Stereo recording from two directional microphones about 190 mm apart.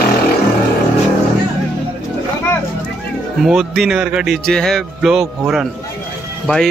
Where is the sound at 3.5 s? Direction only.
Centre (ahead or behind).